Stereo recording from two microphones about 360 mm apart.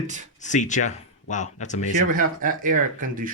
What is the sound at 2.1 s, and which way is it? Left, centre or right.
Speech, right.